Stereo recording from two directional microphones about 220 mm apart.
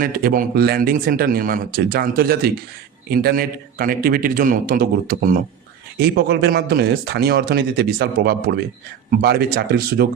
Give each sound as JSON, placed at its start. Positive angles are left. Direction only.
{"t": 0.0, "sound": "a man's voice", "side_deg": -40}